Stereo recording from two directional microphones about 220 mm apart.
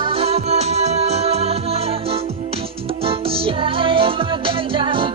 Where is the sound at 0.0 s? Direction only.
25° right (ahead or behind).